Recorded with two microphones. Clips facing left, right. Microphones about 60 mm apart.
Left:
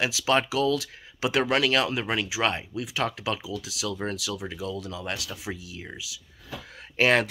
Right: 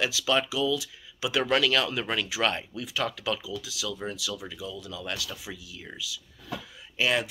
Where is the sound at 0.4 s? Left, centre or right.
Left.